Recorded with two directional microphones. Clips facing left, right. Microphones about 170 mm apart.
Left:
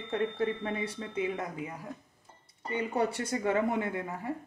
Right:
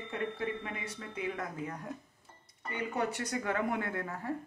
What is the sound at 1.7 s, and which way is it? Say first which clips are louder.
Speech: right 1 dB; 5° left (ahead or behind).